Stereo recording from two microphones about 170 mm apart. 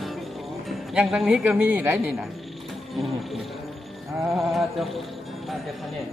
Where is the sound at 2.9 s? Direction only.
Centre (ahead or behind).